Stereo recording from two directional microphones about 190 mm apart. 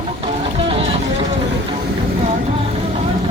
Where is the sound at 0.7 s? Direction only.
30° right (ahead or behind).